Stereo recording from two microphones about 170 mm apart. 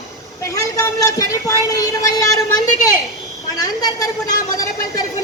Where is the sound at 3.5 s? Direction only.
20° left (ahead or behind).